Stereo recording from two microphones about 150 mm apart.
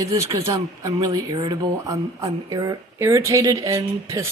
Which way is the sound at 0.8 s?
20° right (ahead or behind).